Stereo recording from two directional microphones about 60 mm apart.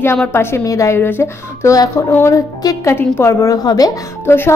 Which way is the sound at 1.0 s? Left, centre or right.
Left.